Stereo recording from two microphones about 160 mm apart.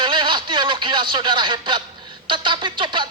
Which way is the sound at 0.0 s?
30° right (ahead or behind).